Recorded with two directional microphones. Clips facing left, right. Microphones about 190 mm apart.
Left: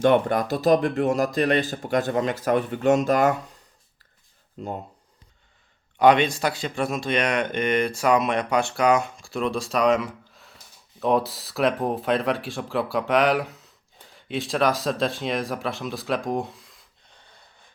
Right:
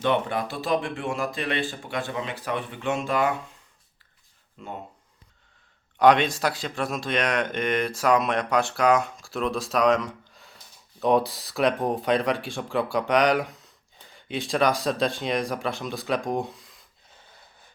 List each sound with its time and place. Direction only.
0.0 s speech: 45° left (ahead or behind)
4.6 s speech: 40° left (ahead or behind)
6.0 s speech: centre (ahead or behind)